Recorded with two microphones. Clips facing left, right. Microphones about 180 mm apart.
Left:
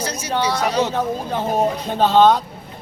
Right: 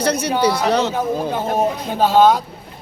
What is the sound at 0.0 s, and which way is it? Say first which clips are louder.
Speech: right 7 dB; 65° right (ahead or behind).